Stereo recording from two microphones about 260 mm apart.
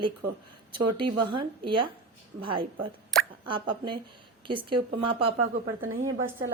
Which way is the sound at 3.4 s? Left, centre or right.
Centre.